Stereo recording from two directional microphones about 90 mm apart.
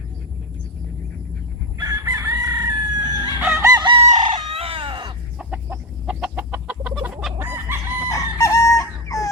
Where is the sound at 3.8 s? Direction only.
70° right (ahead or behind).